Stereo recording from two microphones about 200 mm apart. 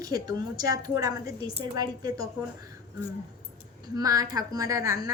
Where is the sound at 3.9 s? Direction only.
15° right (ahead or behind).